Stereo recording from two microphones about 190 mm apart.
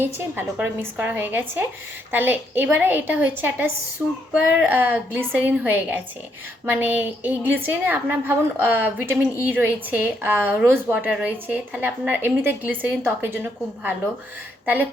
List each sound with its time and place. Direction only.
0.0 s a woman's voice: 10° right (ahead or behind)